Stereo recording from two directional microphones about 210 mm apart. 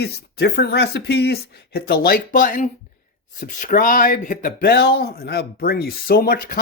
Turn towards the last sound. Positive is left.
turn(degrees=45)  # may be behind; listen again after turning